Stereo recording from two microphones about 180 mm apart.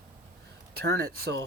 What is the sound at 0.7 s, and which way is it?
Speech, 60° right (ahead or behind).